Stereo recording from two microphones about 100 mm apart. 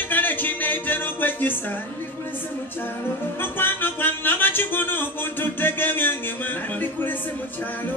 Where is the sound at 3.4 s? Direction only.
20° left (ahead or behind).